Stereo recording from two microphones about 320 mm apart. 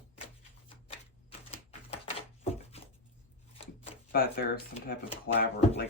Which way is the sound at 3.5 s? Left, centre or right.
Centre.